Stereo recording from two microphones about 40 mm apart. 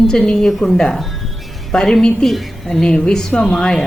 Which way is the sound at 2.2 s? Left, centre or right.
Centre.